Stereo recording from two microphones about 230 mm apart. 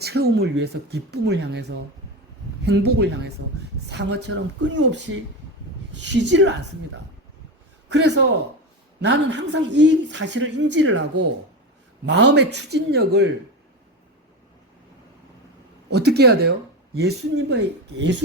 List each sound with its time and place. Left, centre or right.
0.0 s a woman's voice: right
7.9 s a man's voice: right
12.0 s a woman's voice: right
15.9 s a woman's voice: right